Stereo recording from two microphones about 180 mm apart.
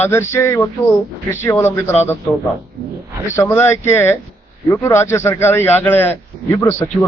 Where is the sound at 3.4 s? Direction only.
10° left (ahead or behind).